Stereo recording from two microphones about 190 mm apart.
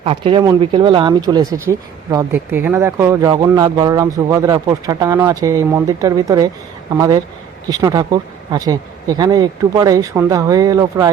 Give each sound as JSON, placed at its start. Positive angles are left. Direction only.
{"t": 0.0, "sound": "speech", "side_deg": -30}